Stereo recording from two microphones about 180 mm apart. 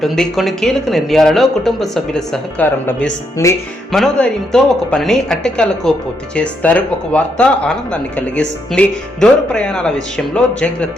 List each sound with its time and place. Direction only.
0.0 s speech: centre (ahead or behind)
3.9 s speech: centre (ahead or behind)